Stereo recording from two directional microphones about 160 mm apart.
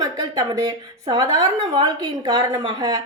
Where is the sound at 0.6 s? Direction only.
25° right (ahead or behind).